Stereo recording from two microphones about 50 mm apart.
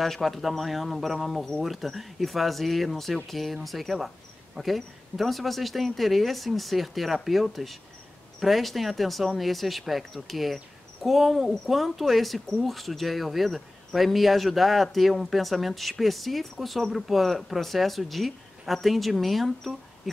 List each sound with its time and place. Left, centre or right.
0.0 s speech: centre